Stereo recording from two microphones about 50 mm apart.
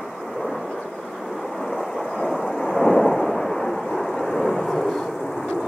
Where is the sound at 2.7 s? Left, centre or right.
Centre.